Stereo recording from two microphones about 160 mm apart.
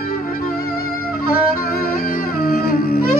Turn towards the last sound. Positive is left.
turn(degrees=70)  # may be behind; listen again after turning